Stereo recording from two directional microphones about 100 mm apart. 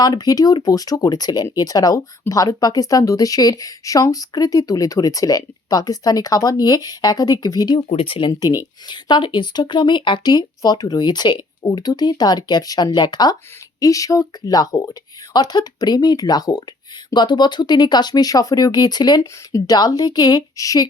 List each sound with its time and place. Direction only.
0.0 s speech: 40° left (ahead or behind)
7.8 s speech: 65° left (ahead or behind)
8.3 s speech: 40° left (ahead or behind)
8.9 s a woman's voice: 50° left (ahead or behind)